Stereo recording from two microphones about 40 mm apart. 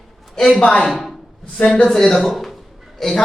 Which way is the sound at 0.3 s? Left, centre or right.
Centre.